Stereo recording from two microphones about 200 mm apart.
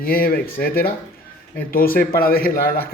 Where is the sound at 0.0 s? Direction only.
50° left (ahead or behind).